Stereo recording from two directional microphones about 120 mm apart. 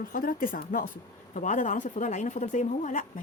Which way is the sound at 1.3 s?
90° left.